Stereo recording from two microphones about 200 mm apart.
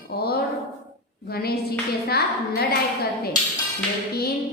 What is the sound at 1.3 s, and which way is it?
A woman's voice, 50° left (ahead or behind).